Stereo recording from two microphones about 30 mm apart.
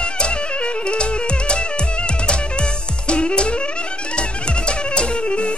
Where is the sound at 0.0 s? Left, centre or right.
Left.